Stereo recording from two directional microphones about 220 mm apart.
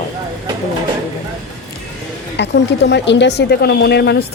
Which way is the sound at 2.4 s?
50° left (ahead or behind).